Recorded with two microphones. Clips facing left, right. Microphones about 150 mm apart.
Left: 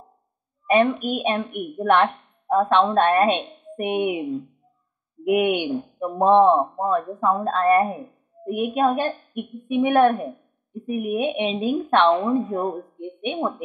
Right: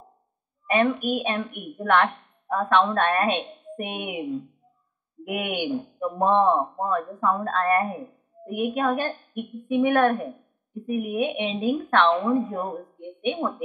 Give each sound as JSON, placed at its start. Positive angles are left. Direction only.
{"t": 0.7, "sound": "speech", "side_deg": 25}
{"t": 5.2, "sound": "speech", "side_deg": 25}